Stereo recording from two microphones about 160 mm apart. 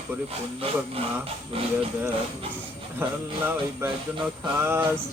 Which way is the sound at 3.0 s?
15° right (ahead or behind).